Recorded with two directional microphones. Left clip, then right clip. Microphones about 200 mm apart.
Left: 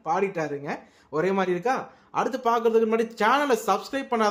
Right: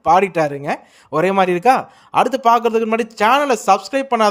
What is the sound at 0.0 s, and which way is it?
A man's voice, 45° right (ahead or behind).